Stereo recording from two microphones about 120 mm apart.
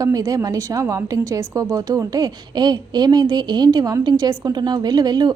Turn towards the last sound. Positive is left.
turn(degrees=-35)  # may be behind; listen again after turning